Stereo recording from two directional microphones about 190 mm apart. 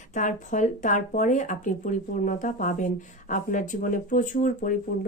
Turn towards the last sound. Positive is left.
turn(degrees=45)  # may be behind; listen again after turning